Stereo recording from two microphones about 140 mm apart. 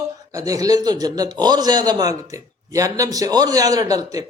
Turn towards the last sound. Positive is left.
turn(degrees=-25)  # may be behind; listen again after turning